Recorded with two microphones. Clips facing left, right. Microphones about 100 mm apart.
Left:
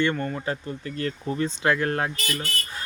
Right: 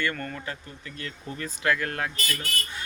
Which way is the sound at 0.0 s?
25° left (ahead or behind).